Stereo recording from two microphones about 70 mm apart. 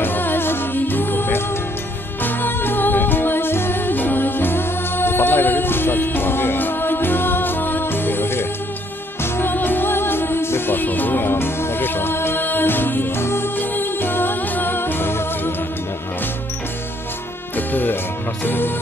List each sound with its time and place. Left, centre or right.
0.0 s music: left
17.6 s music: left